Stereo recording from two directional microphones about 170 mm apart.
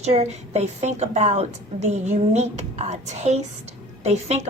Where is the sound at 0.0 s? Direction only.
40° right (ahead or behind).